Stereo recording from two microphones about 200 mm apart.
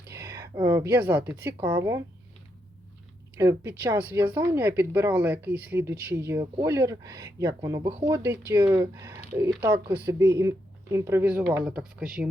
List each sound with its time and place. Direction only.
0.1 s a woman's voice: 15° right (ahead or behind)
3.3 s speech: 15° right (ahead or behind)
7.9 s speech: 30° right (ahead or behind)
8.1 s speech: 15° right (ahead or behind)